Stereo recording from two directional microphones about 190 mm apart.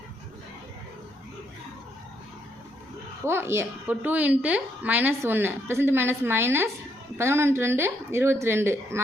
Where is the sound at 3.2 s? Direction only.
15° right (ahead or behind).